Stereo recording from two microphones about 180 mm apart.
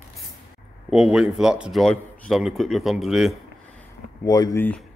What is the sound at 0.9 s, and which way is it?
A man's voice, 5° right (ahead or behind).